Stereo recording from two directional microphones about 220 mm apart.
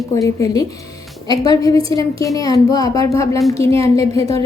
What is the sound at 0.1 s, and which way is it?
A child's voice, 15° left (ahead or behind).